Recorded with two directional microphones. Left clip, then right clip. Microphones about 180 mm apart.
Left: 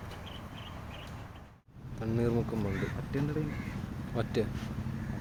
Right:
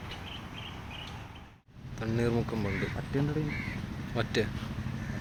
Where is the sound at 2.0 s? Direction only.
5° left (ahead or behind).